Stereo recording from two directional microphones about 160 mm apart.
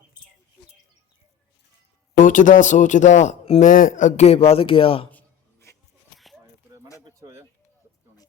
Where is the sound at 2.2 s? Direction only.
55° left (ahead or behind); by 5.1 s 35° left (ahead or behind).